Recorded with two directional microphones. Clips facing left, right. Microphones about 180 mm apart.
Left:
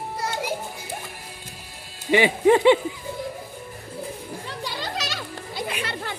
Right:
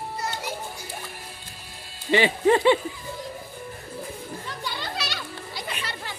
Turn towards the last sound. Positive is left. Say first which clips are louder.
# left 5 dB
turn(degrees=55)  # may be behind; listen again after turning